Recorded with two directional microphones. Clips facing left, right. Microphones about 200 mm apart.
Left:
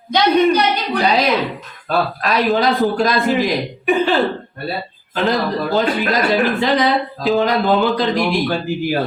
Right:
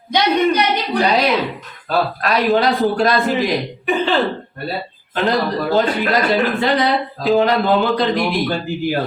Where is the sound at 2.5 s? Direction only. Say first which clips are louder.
Right 1 dB; centre (ahead or behind).